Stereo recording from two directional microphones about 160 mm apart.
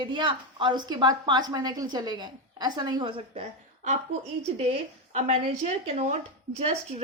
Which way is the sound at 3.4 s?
45° right (ahead or behind).